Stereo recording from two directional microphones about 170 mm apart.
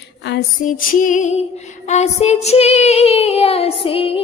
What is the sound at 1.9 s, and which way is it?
Female singing, 40° left (ahead or behind).